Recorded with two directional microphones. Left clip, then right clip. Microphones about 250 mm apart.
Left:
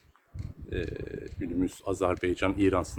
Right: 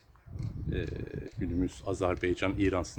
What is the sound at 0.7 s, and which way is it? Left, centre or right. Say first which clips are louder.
Speech: left 3 dB; centre.